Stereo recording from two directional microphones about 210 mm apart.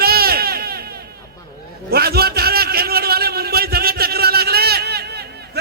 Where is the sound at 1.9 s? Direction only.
50° right (ahead or behind).